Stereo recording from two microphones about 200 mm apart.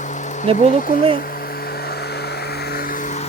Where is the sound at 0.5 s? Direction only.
30° right (ahead or behind).